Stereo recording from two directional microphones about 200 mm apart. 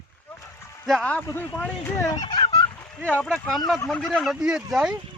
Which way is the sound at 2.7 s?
10° left (ahead or behind).